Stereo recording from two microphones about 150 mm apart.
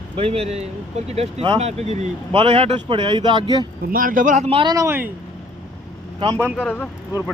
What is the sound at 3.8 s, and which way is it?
Speech, 70° right (ahead or behind).